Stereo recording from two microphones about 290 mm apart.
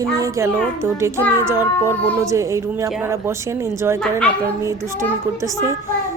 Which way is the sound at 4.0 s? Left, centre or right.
Centre.